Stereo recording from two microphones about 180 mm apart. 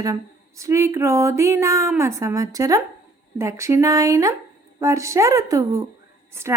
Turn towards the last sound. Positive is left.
turn(degrees=-15)  # may be behind; listen again after turning